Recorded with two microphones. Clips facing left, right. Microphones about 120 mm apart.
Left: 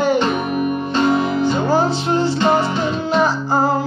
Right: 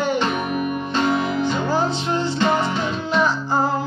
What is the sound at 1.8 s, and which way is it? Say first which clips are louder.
Music: left 4 dB; 5° left (ahead or behind).